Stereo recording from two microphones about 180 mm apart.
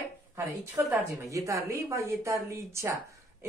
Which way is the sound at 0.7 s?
15° right (ahead or behind).